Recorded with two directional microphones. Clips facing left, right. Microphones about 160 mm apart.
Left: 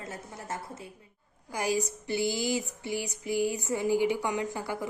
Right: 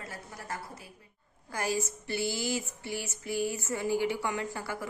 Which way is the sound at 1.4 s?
15° left (ahead or behind).